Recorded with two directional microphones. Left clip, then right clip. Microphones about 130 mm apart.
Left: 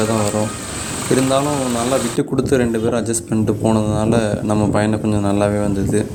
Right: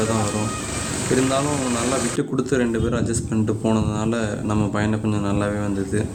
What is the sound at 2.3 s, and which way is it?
Speech, 30° left (ahead or behind).